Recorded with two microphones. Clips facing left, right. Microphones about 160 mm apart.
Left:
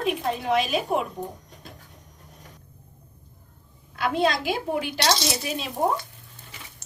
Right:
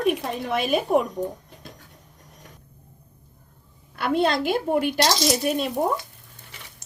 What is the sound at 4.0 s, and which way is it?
Speech, 60° right (ahead or behind).